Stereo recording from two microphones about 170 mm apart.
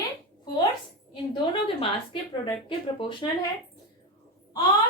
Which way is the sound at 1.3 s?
35° left (ahead or behind).